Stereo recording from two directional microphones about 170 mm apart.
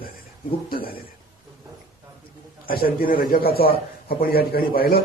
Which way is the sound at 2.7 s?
60° left (ahead or behind).